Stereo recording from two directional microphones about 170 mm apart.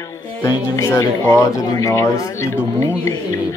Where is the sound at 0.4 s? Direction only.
15° left (ahead or behind).